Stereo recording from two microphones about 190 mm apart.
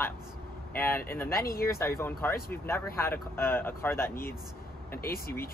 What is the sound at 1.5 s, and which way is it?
Speech, 50° left (ahead or behind).